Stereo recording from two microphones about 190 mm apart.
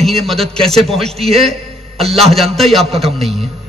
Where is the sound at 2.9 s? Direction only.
30° right (ahead or behind).